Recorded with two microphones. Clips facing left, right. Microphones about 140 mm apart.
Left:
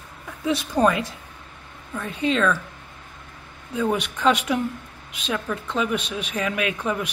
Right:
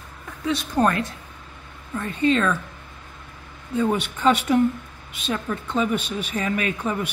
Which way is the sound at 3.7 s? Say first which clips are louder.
Right 1 dB; centre (ahead or behind).